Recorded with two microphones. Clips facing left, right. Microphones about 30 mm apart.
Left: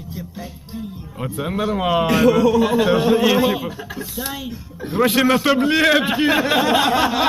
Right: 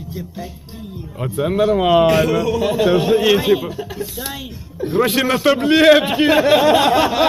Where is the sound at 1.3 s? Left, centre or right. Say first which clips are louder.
Right 6 dB; centre.